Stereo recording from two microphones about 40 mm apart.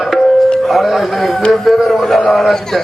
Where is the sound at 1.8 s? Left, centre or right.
Centre.